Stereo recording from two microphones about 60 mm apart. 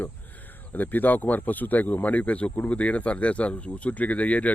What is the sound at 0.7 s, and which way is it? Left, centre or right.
Speech, left.